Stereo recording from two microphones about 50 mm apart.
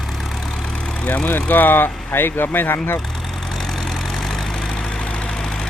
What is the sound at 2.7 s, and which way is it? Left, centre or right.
Speech, left.